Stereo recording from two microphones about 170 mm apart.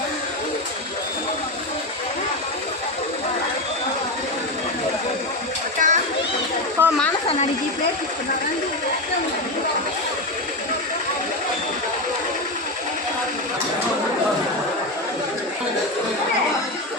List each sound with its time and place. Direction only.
5.8 s children playing: 50° right (ahead or behind)
6.8 s snake: 10° right (ahead or behind)